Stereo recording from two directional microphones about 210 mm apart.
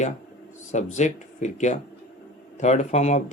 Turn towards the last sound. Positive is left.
turn(degrees=35)  # may be behind; listen again after turning